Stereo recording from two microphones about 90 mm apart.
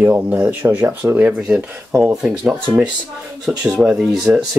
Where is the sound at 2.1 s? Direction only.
5° right (ahead or behind).